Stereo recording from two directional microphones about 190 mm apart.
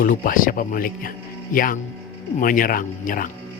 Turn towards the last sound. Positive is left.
turn(degrees=45)  # may be behind; listen again after turning